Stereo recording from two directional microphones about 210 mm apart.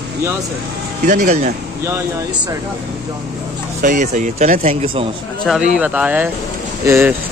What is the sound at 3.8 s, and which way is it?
Speech, 35° right (ahead or behind).